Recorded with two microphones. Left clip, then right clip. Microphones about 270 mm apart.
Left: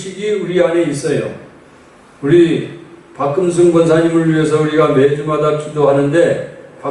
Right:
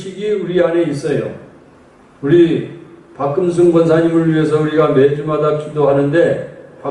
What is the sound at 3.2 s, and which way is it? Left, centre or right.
A man's voice, centre.